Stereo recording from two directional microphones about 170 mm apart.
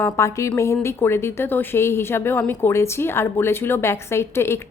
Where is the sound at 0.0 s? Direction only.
15° left (ahead or behind).